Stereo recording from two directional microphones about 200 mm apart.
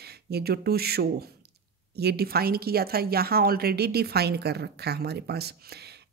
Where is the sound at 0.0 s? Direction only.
55° right (ahead or behind).